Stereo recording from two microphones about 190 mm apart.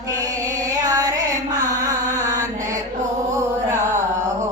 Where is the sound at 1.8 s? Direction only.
15° right (ahead or behind).